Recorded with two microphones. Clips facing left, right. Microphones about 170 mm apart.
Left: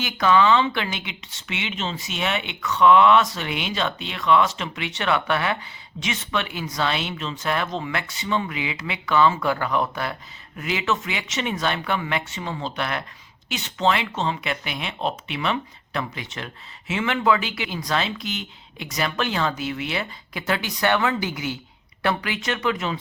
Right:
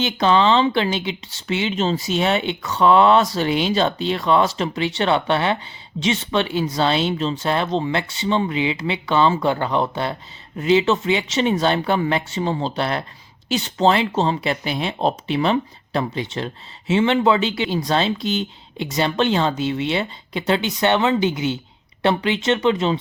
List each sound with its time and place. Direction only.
0.0 s speech: 30° right (ahead or behind)